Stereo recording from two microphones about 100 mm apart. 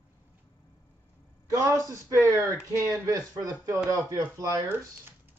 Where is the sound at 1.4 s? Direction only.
35° right (ahead or behind).